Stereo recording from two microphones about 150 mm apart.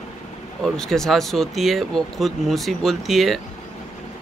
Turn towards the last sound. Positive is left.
turn(degrees=0)  # may be behind; listen again after turning